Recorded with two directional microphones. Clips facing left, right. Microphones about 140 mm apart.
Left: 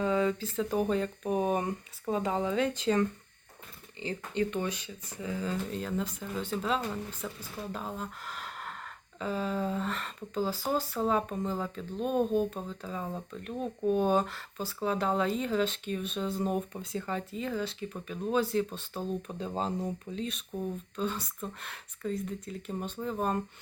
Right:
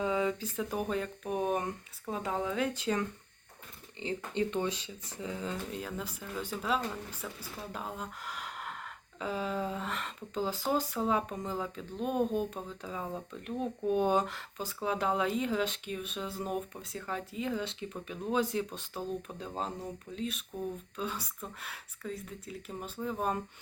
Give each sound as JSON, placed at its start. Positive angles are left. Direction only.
{"t": 0.0, "sound": "speech", "side_deg": -15}
{"t": 4.0, "sound": "speech", "side_deg": -20}
{"t": 17.3, "sound": "speech", "side_deg": -15}
{"t": 19.4, "sound": "speech", "side_deg": 0}